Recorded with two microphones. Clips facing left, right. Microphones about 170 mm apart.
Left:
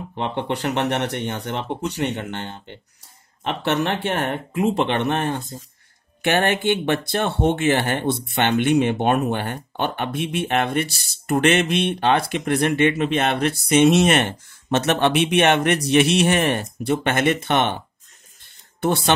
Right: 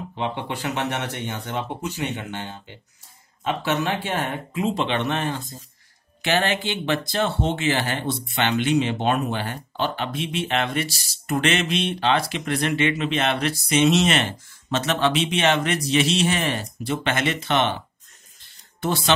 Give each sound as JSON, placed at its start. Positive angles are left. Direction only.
{"t": 0.1, "sound": "speech", "side_deg": 55}
{"t": 18.8, "sound": "speech", "side_deg": 55}